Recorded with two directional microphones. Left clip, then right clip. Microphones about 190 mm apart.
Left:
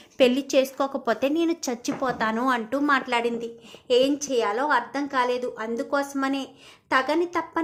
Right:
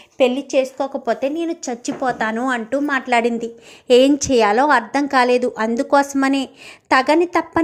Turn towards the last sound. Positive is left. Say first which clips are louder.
# right 9 dB
turn(degrees=-25)  # may be behind; listen again after turning